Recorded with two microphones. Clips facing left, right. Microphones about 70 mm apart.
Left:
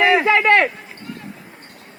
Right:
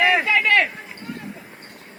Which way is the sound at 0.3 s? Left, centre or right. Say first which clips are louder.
Left 4 dB; left.